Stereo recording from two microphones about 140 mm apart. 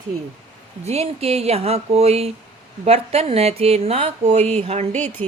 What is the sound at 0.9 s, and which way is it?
Speech, 45° right (ahead or behind).